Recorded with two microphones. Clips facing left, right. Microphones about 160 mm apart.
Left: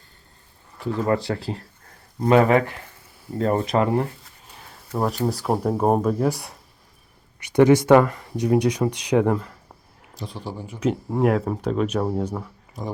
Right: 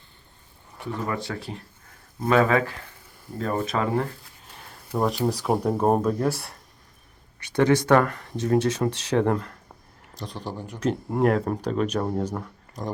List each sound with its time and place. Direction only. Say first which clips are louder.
1.3 s speech: left 6 dB; 30° left (ahead or behind)
2.2 s speech: left 4 dB; 20° left (ahead or behind)
4.5 s a sound: even; centre (ahead or behind)
4.9 s speech: even; 5° left (ahead or behind)
6.2 s speech: left 2 dB; 15° left (ahead or behind)
8.0 s speech: left 3 dB; 10° left (ahead or behind)